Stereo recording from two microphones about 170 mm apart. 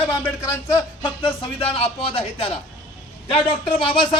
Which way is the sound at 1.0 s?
30° left (ahead or behind).